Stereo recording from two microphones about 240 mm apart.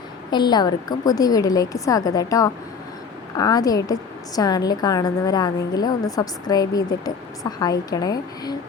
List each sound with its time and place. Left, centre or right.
0.3 s a woman's voice: centre